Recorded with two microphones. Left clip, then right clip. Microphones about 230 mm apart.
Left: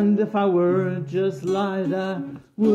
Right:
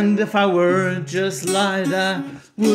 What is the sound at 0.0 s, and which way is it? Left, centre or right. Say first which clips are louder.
Music: right 3 dB; right.